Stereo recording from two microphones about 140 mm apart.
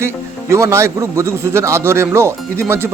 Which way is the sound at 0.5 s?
20° right (ahead or behind).